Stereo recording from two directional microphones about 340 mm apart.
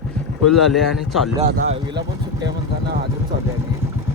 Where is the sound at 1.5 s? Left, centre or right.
Right.